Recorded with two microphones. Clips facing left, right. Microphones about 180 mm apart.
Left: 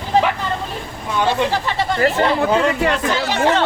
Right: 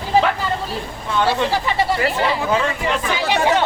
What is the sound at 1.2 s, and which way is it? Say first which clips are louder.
Speech: left 2 dB; 10° right (ahead or behind).